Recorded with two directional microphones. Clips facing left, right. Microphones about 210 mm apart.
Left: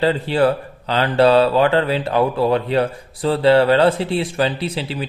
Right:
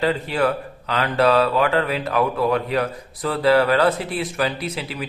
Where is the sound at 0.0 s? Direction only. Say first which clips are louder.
Left 4 dB; 30° left (ahead or behind).